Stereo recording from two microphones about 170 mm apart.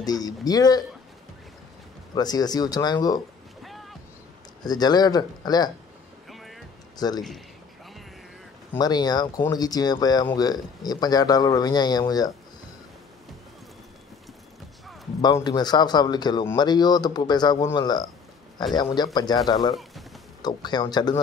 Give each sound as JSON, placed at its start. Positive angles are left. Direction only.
{"t": 0.0, "sound": "speech", "side_deg": 20}
{"t": 2.1, "sound": "speech", "side_deg": 25}
{"t": 3.6, "sound": "music", "side_deg": 0}
{"t": 4.6, "sound": "speech", "side_deg": 25}
{"t": 6.2, "sound": "music", "side_deg": 0}
{"t": 7.0, "sound": "speech", "side_deg": 25}
{"t": 8.7, "sound": "speech", "side_deg": 25}
{"t": 15.2, "sound": "speech", "side_deg": 25}